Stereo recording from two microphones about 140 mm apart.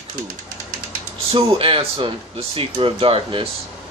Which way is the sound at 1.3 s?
40° right (ahead or behind).